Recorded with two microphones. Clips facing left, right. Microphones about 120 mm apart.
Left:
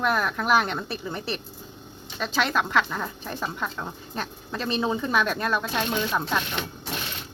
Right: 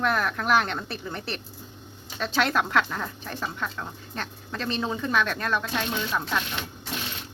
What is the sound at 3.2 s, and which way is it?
Speech, 15° left (ahead or behind).